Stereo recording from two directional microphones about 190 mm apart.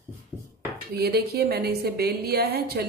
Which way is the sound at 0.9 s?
55° right (ahead or behind).